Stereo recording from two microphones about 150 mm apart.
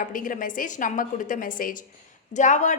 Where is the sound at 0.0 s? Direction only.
65° left (ahead or behind).